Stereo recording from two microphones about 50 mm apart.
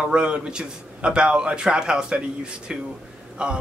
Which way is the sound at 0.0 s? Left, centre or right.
Centre.